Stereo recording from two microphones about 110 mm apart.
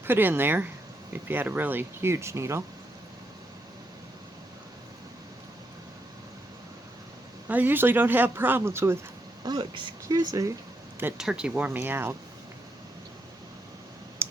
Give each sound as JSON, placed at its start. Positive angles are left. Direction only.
{"t": 0.0, "sound": "speech", "side_deg": -20}
{"t": 7.4, "sound": "speech", "side_deg": -20}
{"t": 9.4, "sound": "speech", "side_deg": -40}
{"t": 11.2, "sound": "speech", "side_deg": -5}
{"t": 14.2, "sound": "clicking", "side_deg": -25}